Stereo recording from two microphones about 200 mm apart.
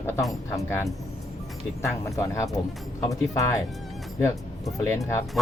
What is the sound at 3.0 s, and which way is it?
Speech, 15° left (ahead or behind).